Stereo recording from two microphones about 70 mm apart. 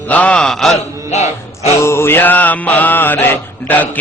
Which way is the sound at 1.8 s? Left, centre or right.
Left.